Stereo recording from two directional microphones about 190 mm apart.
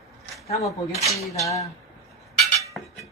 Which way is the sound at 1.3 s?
15° left (ahead or behind).